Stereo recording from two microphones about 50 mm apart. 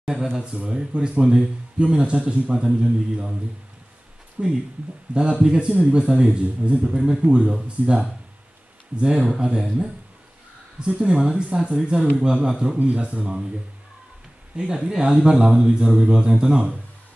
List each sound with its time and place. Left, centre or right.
0.0 s a man's voice: centre
4.4 s speech: right
5.9 s a man's voice: centre
9.4 s a man's voice: centre
14.6 s a man's voice: centre